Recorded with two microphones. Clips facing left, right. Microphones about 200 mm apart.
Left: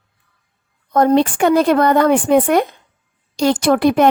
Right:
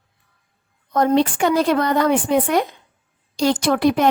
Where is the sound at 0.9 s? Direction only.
50° left (ahead or behind).